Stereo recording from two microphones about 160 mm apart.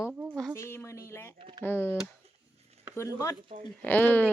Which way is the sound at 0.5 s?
15° left (ahead or behind).